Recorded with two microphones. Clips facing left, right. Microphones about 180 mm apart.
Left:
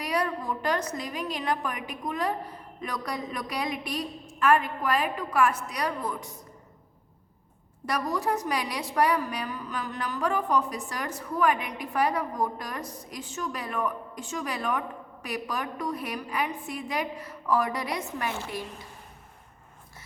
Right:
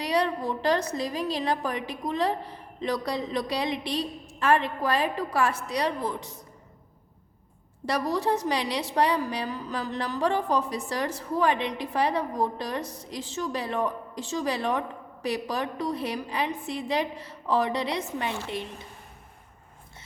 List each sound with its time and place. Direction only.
0.0 s a woman's voice: 30° right (ahead or behind)
7.9 s a woman's voice: 30° right (ahead or behind)